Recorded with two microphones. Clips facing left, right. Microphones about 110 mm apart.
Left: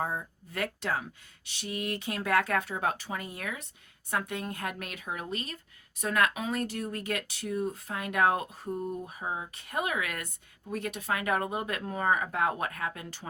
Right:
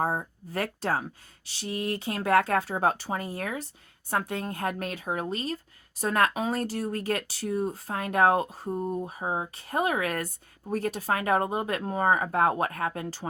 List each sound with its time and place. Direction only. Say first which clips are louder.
0.0 s speech: right 5 dB; 40° right (ahead or behind)